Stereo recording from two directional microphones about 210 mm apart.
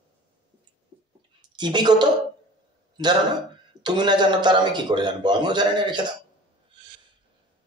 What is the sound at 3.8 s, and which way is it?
A man's voice, 20° right (ahead or behind).